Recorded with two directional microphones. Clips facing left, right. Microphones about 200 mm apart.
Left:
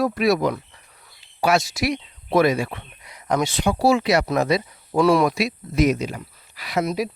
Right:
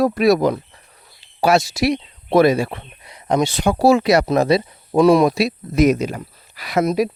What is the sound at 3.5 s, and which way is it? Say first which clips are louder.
Speech: right 4 dB; 45° right (ahead or behind).